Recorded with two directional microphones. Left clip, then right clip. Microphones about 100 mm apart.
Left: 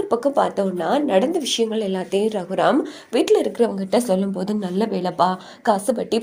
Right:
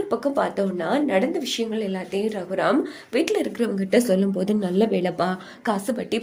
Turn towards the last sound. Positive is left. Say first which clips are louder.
# left 5 dB
turn(degrees=20)  # may be behind; listen again after turning